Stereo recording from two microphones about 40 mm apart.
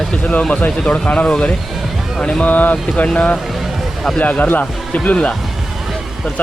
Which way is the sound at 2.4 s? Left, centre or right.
Left.